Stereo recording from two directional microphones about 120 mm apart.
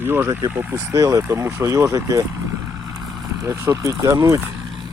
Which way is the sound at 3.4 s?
25° right (ahead or behind).